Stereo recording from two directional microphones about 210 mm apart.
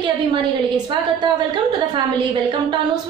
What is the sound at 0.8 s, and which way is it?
A woman's voice, 20° right (ahead or behind).